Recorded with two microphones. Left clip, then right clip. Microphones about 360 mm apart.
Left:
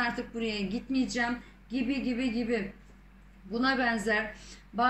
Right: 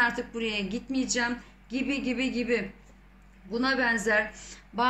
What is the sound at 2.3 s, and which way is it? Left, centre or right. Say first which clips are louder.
Speech: right 5 dB; right.